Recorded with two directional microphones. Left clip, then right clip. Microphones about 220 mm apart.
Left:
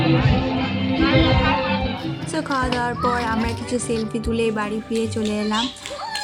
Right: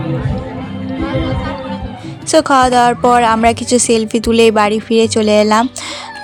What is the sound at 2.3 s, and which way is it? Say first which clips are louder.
A woman's voice: right 14 dB; 45° right (ahead or behind).